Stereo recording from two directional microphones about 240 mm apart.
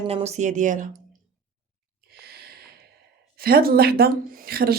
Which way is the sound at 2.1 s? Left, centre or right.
Right.